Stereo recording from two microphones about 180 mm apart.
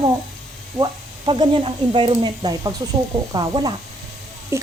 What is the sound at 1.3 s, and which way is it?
Speech, 25° right (ahead or behind).